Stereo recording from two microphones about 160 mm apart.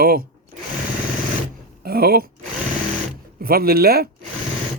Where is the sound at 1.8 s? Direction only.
70° right (ahead or behind).